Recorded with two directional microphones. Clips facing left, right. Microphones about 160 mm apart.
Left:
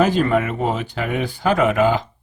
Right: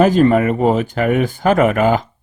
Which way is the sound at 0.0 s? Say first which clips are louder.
Right 5 dB; 40° right (ahead or behind).